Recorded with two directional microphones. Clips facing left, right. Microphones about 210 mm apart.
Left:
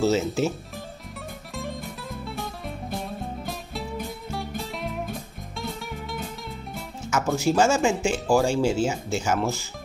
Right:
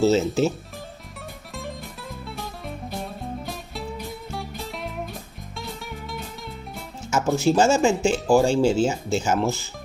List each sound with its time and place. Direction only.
0.0 s speech: 30° right (ahead or behind)
1.5 s music: centre (ahead or behind)
7.1 s speech: 25° right (ahead or behind)